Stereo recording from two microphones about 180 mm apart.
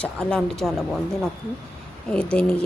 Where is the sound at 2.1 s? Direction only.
5° left (ahead or behind).